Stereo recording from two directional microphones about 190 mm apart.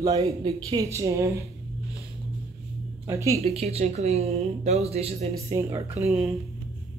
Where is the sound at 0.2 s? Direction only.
30° right (ahead or behind).